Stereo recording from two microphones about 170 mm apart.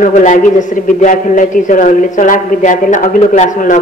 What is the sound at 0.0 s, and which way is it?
A man's voice, 45° left (ahead or behind).